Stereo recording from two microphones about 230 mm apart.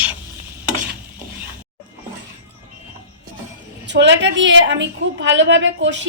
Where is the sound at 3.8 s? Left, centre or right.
Right.